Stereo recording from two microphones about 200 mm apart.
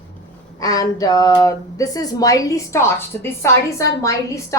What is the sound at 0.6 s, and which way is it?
Speech, 15° left (ahead or behind).